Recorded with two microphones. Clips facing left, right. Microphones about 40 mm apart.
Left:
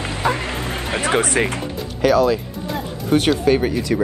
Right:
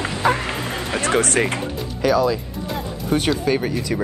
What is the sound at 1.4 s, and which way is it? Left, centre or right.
Speech, centre.